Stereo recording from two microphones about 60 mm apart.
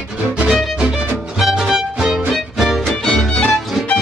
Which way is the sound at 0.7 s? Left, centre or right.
Centre.